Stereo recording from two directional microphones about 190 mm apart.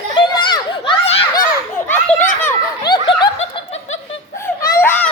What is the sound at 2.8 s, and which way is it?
Snicker, 25° left (ahead or behind).